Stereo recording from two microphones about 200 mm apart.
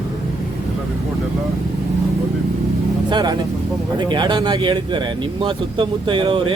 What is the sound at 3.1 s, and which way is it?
Speech, 20° right (ahead or behind).